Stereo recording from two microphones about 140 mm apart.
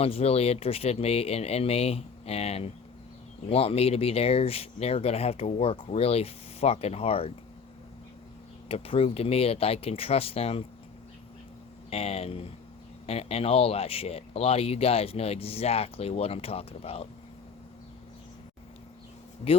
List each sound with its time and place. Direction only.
0.0 s speech: 45° left (ahead or behind)
8.7 s speech: 40° left (ahead or behind)
11.9 s speech: 45° left (ahead or behind)